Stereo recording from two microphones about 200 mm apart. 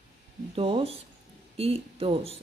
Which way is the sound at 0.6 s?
30° right (ahead or behind).